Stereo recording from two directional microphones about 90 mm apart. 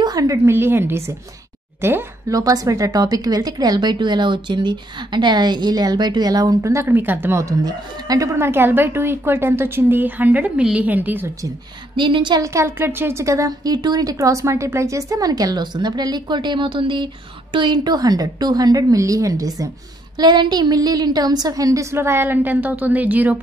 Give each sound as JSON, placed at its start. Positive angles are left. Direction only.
{"t": 0.0, "sound": "a sound", "side_deg": -40}
{"t": 0.5, "sound": "speech", "side_deg": -25}
{"t": 2.3, "sound": "speech", "side_deg": -40}
{"t": 7.6, "sound": "speech", "side_deg": -45}
{"t": 8.4, "sound": "speech", "side_deg": -25}
{"t": 12.0, "sound": "a woman's voice", "side_deg": -60}
{"t": 12.4, "sound": "a woman's voice", "side_deg": -35}
{"t": 13.7, "sound": "speech", "side_deg": -50}
{"t": 20.2, "sound": "speech", "side_deg": -55}
{"t": 21.9, "sound": "speech", "side_deg": -25}